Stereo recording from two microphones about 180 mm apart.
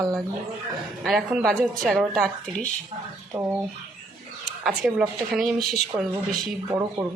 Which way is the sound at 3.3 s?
15° right (ahead or behind).